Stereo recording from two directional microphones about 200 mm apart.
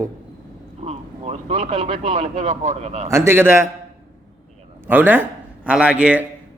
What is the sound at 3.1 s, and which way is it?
Speech, 15° right (ahead or behind).